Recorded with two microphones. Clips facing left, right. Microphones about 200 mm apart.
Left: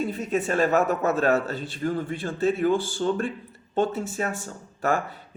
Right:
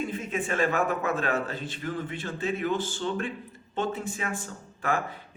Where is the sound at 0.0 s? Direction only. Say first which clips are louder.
Left 5 dB; 40° left (ahead or behind).